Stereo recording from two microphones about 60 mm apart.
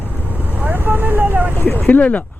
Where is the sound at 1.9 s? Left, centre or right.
Left.